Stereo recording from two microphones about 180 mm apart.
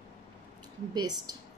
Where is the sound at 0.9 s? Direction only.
20° right (ahead or behind).